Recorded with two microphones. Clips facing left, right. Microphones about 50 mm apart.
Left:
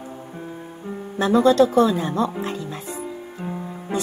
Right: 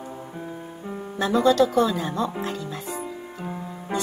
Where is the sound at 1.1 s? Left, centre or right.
Centre.